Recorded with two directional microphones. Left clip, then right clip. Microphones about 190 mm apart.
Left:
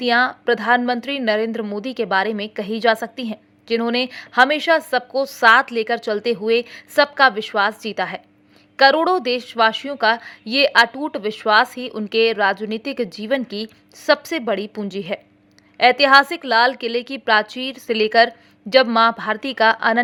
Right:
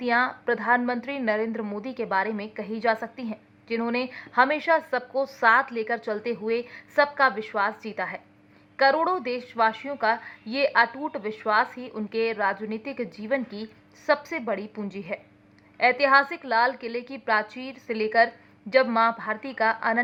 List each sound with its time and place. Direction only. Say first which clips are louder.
0.0 s a woman's voice: left 7 dB; 30° left (ahead or behind)